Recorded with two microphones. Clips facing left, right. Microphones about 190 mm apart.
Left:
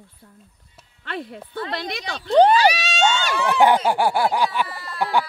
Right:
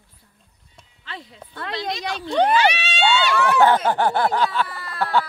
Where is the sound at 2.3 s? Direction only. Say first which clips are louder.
Left 4 dB; 35° left (ahead or behind).